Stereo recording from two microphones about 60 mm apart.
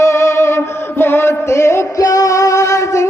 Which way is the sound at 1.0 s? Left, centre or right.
Left.